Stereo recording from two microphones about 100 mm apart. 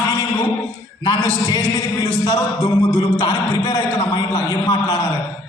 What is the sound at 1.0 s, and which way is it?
A man's voice, 45° left (ahead or behind).